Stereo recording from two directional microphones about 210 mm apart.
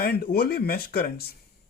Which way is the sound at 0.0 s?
45° left (ahead or behind).